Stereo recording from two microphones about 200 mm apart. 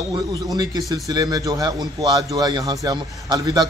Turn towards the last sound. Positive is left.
turn(degrees=-20)  # may be behind; listen again after turning